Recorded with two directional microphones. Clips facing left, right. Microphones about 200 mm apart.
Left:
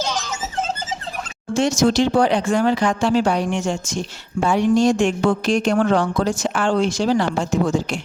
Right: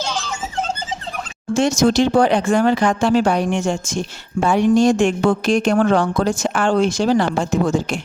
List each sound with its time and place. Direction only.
1.5 s speech: 50° right (ahead or behind)